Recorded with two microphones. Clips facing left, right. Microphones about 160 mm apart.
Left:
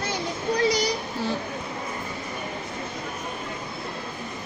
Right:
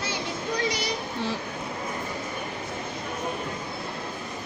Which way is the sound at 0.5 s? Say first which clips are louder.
Left 7 dB; 35° left (ahead or behind).